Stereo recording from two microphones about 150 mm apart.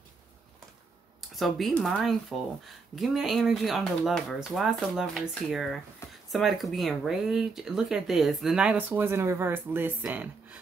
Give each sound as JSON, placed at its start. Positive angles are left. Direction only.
{"t": 1.3, "sound": "speech", "side_deg": 0}
{"t": 6.0, "sound": "a sound", "side_deg": 20}
{"t": 6.3, "sound": "speech", "side_deg": 0}